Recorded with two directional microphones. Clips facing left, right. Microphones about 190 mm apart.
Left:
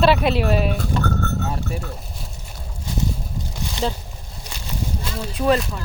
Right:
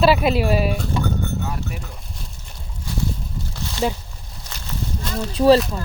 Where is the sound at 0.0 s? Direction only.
5° right (ahead or behind).